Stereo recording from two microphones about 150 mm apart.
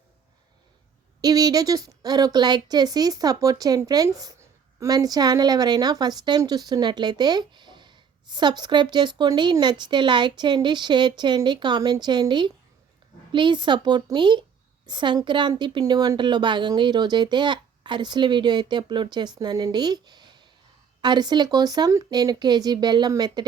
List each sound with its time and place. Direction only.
1.2 s speech: 25° right (ahead or behind)